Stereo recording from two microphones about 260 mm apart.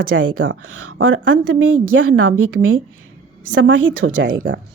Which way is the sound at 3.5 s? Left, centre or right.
Right.